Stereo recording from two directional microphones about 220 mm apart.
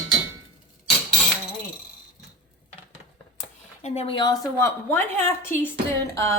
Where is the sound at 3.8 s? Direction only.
30° left (ahead or behind).